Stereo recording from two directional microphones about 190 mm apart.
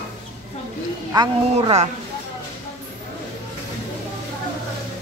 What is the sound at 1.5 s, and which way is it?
Speech, 35° right (ahead or behind).